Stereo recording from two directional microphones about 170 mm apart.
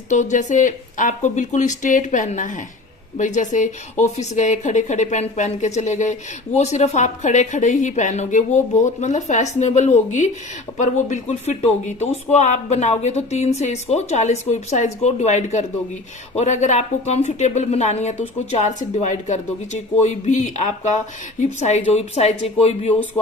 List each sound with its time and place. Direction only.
0.1 s speech: 45° left (ahead or behind)
21.6 s speech: 40° left (ahead or behind)